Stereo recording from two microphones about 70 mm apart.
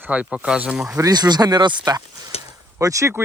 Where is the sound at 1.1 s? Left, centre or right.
Right.